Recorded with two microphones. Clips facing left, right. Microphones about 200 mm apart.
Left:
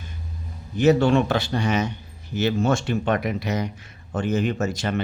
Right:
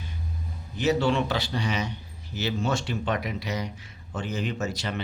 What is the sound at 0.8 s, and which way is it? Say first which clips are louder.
Speech: left 6 dB; 50° left (ahead or behind).